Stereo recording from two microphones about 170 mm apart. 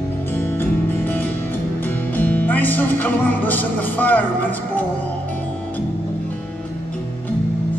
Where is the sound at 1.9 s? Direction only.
10° left (ahead or behind).